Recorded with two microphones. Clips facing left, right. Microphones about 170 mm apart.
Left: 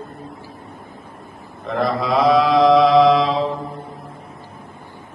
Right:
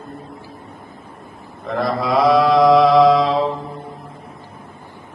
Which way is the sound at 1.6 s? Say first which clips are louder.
Even; 10° right (ahead or behind).